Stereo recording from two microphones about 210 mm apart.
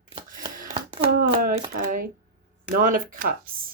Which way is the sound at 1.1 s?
45° right (ahead or behind).